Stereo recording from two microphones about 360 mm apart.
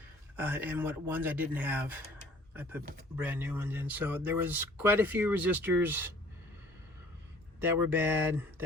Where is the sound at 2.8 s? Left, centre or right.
Right.